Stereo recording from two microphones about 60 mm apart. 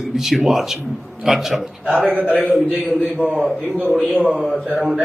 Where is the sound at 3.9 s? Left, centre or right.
Centre.